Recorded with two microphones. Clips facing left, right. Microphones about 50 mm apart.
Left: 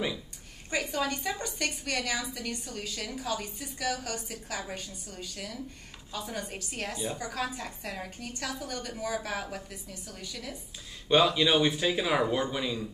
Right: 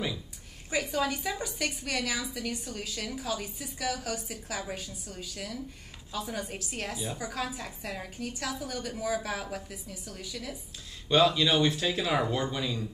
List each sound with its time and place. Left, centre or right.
0.7 s a woman's voice: centre
11.1 s speech: centre